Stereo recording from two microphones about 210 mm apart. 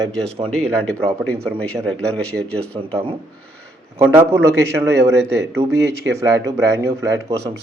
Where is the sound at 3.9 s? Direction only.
10° right (ahead or behind).